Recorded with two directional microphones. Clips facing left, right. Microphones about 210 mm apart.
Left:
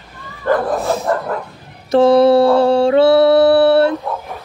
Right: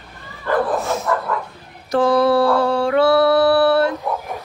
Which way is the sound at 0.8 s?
35° left (ahead or behind).